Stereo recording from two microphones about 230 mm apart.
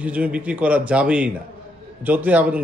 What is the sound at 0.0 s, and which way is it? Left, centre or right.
Speech, centre.